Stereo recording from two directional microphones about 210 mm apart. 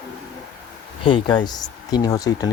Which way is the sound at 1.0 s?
20° left (ahead or behind).